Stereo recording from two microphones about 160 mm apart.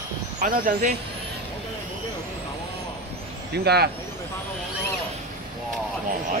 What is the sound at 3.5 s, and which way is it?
Speech, 90° right.